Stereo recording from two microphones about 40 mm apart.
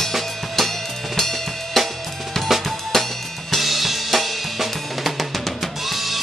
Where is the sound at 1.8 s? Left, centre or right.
Centre.